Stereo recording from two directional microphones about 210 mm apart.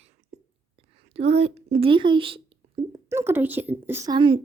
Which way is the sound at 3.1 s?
10° right (ahead or behind).